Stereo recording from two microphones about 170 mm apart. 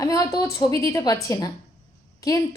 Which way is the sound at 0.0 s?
20° left (ahead or behind).